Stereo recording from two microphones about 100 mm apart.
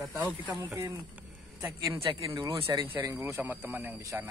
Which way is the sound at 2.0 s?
65° right (ahead or behind).